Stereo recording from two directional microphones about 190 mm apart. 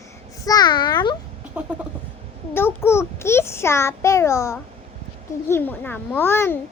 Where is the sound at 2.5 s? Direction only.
10° left (ahead or behind).